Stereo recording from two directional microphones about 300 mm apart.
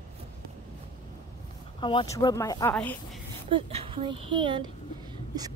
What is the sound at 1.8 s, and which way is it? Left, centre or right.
Speech, centre.